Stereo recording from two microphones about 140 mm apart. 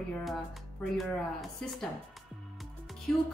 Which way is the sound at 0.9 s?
Centre (ahead or behind).